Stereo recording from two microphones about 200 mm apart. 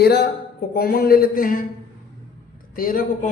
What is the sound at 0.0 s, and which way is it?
Speech, 55° left (ahead or behind).